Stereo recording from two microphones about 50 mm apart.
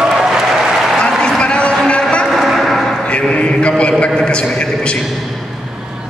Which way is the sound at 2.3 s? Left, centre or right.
Centre.